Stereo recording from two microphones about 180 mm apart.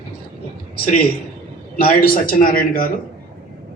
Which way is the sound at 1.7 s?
55° left (ahead or behind).